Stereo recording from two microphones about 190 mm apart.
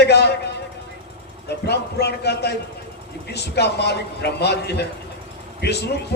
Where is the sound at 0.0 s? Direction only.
60° left (ahead or behind).